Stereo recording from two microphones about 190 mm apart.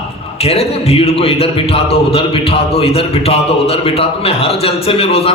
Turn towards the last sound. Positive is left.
turn(degrees=30)  # may be behind; listen again after turning